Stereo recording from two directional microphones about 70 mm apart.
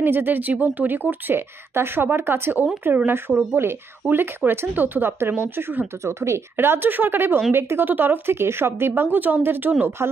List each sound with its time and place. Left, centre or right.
0.0 s speech: right